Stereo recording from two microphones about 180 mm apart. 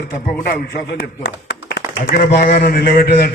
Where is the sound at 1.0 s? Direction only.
70° left (ahead or behind).